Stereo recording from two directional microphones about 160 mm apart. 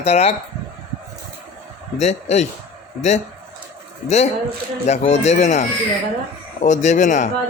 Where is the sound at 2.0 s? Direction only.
45° left (ahead or behind).